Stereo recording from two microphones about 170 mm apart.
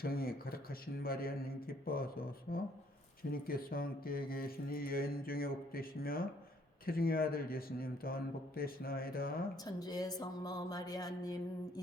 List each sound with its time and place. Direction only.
0.0 s speech: 60° left (ahead or behind)
9.6 s speech: 20° left (ahead or behind)